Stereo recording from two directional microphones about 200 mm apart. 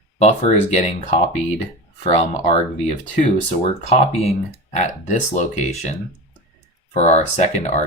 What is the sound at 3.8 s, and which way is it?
Speech, 35° left (ahead or behind).